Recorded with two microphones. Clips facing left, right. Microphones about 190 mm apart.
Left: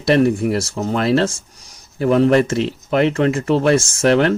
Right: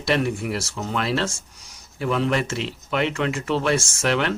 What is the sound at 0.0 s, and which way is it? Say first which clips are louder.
Speech: left 8 dB; 40° left (ahead or behind).